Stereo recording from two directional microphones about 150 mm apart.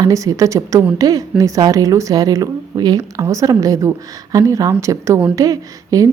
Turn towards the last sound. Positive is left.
turn(degrees=-25)  # may be behind; listen again after turning